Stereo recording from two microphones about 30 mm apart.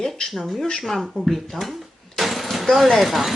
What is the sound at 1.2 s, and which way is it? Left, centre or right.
Speech, left.